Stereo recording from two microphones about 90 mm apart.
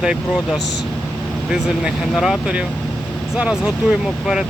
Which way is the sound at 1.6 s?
5° right (ahead or behind).